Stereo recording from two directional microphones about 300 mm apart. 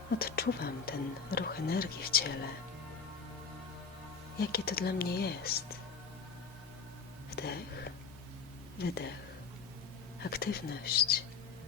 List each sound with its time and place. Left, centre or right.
0.2 s speech: left
4.4 s speech: left
7.3 s speech: left
10.2 s speech: left